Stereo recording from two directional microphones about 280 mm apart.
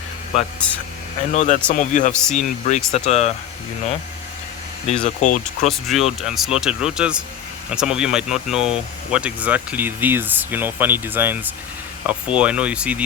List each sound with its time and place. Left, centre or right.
1.3 s speech: left
2.2 s speech: centre
2.6 s speech: left
4.9 s speech: left
5.6 s speech: centre